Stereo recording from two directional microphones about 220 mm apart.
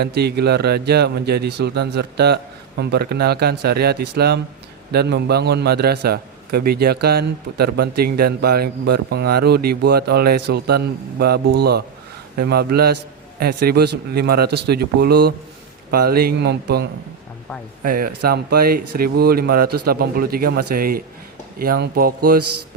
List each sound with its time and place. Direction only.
0.0 s a man's voice: 45° right (ahead or behind)
12.4 s a man's voice: 45° right (ahead or behind)
19.6 s a man's voice: 90° right
19.9 s a man's voice: 45° right (ahead or behind)
22.4 s a man's voice: 90° right